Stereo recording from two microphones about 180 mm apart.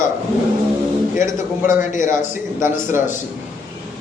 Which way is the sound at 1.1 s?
45° left (ahead or behind).